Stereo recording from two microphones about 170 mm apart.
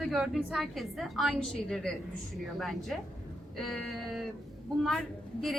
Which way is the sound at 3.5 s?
Centre (ahead or behind).